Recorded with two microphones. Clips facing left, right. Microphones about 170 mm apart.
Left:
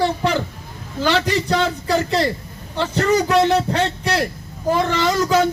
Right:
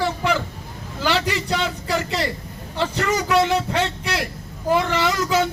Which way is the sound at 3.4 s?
35° left (ahead or behind).